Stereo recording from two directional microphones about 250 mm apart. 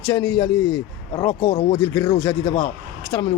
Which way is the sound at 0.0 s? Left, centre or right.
Centre.